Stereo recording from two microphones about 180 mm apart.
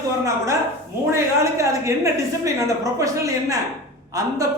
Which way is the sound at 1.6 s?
15° right (ahead or behind).